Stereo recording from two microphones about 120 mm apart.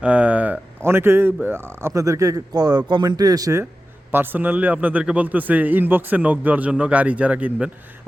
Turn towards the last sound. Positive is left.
turn(degrees=-10)  # may be behind; listen again after turning